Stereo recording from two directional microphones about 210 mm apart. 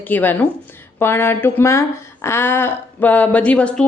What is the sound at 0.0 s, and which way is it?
Speech, 10° left (ahead or behind).